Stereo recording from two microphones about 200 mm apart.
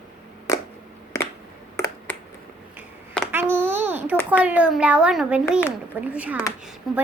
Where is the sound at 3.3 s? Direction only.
10° right (ahead or behind).